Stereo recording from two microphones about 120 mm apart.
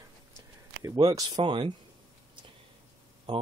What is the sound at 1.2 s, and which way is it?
Speech, 35° right (ahead or behind).